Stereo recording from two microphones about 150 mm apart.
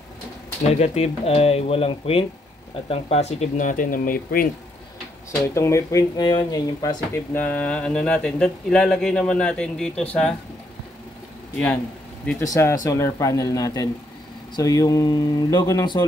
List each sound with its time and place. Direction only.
0.7 s speech: 45° left (ahead or behind); by 4.5 s 75° left (ahead or behind)
5.4 s speech: 20° left (ahead or behind)
7.3 s speech: 10° left (ahead or behind)
11.5 s speech: 10° left (ahead or behind)